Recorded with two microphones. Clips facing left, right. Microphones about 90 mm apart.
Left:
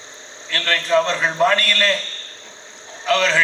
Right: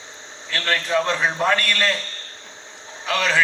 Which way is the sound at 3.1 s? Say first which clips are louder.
Left 3 dB; 15° right (ahead or behind).